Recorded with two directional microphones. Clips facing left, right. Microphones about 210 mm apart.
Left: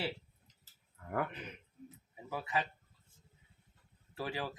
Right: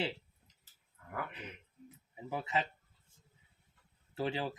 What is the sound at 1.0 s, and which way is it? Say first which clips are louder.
Speech: left 6 dB; 50° left (ahead or behind).